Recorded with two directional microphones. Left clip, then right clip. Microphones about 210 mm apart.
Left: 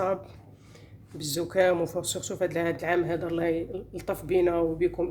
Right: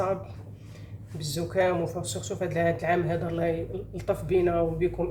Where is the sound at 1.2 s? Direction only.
50° left (ahead or behind).